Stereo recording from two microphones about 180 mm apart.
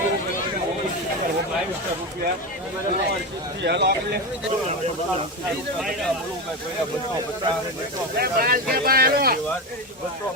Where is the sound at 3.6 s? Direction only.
70° right (ahead or behind).